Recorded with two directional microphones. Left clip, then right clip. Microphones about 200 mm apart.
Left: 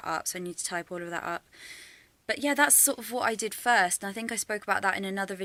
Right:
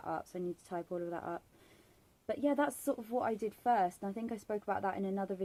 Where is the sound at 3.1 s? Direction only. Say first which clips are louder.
Left 5 dB; 20° left (ahead or behind).